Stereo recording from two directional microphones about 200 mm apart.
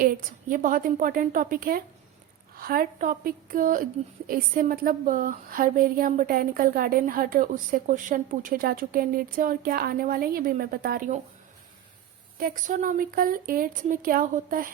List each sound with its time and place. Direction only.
0.0 s speech: 45° right (ahead or behind)
12.4 s speech: 45° right (ahead or behind)